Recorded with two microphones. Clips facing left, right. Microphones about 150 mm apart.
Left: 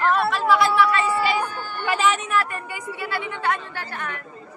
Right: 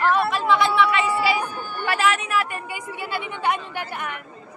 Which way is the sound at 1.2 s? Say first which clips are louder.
Even; 5° right (ahead or behind).